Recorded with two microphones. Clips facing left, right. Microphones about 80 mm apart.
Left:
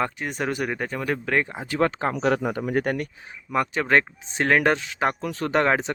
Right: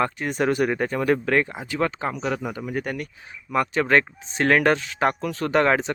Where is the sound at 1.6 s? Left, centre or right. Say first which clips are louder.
Left 2 dB; left.